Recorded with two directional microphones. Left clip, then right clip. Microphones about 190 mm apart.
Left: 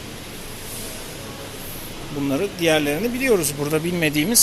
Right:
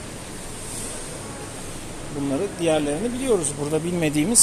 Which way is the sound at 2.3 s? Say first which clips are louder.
Left 3 dB; 15° left (ahead or behind).